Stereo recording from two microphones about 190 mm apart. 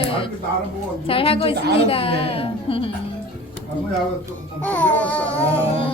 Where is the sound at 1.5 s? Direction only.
60° right (ahead or behind).